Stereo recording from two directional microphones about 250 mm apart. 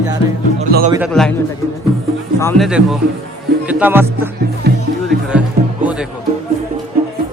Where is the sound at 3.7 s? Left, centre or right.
Centre.